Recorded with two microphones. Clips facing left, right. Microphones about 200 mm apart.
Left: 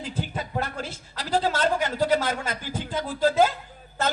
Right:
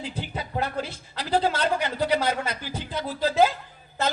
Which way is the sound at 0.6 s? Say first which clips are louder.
Right 3 dB; 45° left (ahead or behind).